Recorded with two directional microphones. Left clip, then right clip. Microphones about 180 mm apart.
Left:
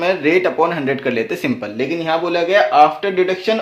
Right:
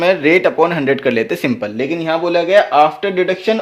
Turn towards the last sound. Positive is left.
turn(degrees=-35)  # may be behind; listen again after turning